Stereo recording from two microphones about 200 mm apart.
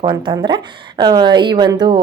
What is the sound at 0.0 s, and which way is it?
A woman's voice, 25° right (ahead or behind).